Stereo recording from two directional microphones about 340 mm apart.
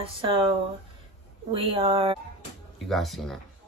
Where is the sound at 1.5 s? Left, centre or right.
Centre.